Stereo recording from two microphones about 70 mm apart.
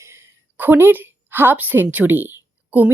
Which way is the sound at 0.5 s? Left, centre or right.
Right.